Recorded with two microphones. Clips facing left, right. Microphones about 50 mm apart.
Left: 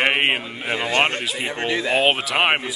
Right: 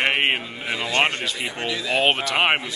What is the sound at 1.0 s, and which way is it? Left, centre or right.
Speech, left.